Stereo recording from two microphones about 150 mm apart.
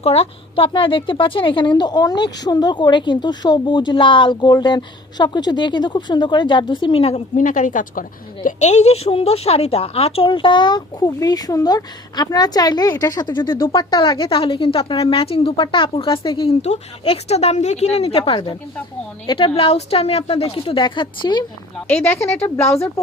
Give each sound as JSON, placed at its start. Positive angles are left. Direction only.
{"t": 0.0, "sound": "a woman's voice", "side_deg": 40}
{"t": 7.3, "sound": "a woman's voice", "side_deg": 60}
{"t": 21.8, "sound": "speech", "side_deg": 10}